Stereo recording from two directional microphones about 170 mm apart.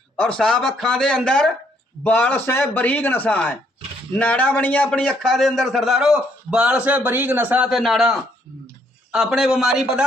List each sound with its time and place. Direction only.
0.2 s a man's voice: 5° left (ahead or behind)